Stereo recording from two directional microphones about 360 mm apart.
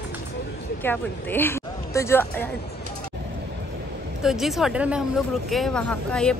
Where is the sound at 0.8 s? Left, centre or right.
Centre.